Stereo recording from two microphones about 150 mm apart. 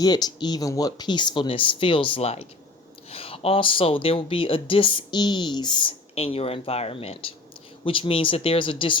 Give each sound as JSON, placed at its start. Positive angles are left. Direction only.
{"t": 0.0, "sound": "speech", "side_deg": 25}